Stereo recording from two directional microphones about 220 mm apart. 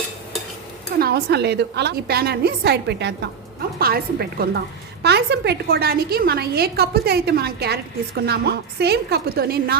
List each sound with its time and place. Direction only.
0.9 s a woman's voice: 45° right (ahead or behind)